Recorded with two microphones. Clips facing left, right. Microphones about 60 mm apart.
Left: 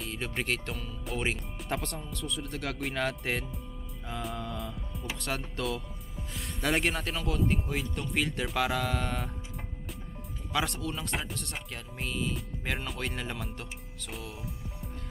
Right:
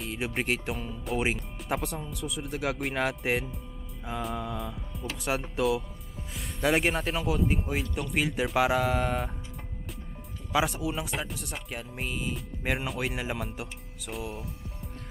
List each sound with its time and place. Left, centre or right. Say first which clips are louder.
0.0 s speech: right 3 dB; centre
3.5 s music: even; centre
5.1 s speech: right 5 dB; centre
10.5 s speech: right 4 dB; centre